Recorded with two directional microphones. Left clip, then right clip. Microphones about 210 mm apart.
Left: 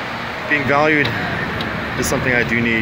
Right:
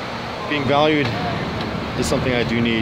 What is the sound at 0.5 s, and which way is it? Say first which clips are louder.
Speech: left 2 dB; 5° right (ahead or behind).